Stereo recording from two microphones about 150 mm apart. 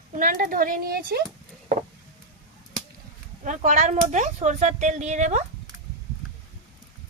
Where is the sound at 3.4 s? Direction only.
55° right (ahead or behind).